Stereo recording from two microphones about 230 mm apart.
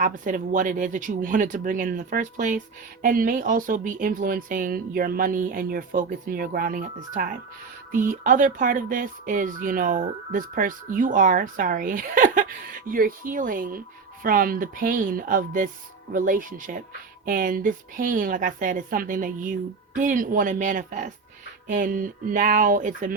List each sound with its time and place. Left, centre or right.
0.0 s speech: right